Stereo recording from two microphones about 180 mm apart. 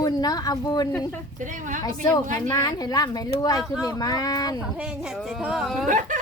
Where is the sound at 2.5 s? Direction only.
20° left (ahead or behind).